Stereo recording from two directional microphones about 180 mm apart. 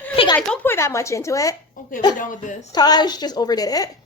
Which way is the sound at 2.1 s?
45° left (ahead or behind).